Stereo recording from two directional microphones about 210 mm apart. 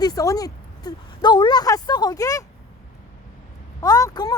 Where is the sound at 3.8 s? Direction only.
15° left (ahead or behind).